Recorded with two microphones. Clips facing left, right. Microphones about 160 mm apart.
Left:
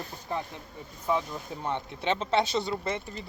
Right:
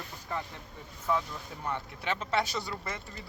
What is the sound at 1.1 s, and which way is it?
Speech, 20° left (ahead or behind).